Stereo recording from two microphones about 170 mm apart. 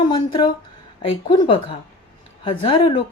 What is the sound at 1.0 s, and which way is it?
Speech, 30° left (ahead or behind).